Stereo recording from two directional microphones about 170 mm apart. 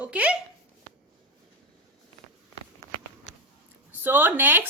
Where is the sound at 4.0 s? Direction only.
10° right (ahead or behind).